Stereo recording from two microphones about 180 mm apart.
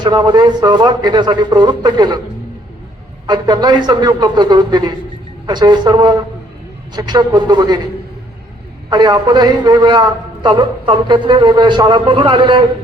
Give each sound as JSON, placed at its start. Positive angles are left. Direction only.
{"t": 0.0, "sound": "a man's voice", "side_deg": -25}
{"t": 3.2, "sound": "a man's voice", "side_deg": -25}
{"t": 8.9, "sound": "a man's voice", "side_deg": -25}